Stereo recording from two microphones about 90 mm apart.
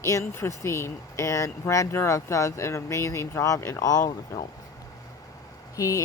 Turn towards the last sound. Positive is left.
turn(degrees=40)  # may be behind; listen again after turning